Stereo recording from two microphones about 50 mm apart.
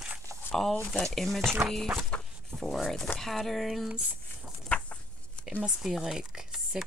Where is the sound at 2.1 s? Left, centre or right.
Left.